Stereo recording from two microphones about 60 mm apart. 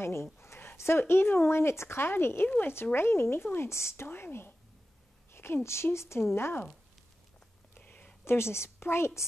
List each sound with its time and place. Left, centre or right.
0.0 s a sound: left
0.7 s speech: left
2.4 s speech: left
2.7 s a woman's voice: left
7.8 s a sound: left
8.3 s speech: left